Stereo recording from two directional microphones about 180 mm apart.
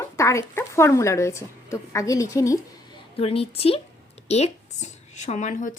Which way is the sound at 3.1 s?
35° left (ahead or behind).